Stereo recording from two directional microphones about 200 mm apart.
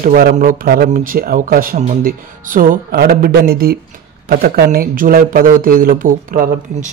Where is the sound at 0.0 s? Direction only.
45° right (ahead or behind).